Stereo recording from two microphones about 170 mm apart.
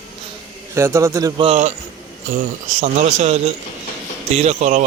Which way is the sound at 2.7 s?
40° right (ahead or behind).